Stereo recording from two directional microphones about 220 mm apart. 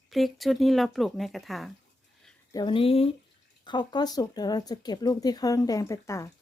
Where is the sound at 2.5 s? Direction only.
20° left (ahead or behind).